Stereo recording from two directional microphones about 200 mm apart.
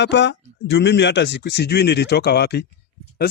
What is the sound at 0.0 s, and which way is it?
Speech, 60° left (ahead or behind).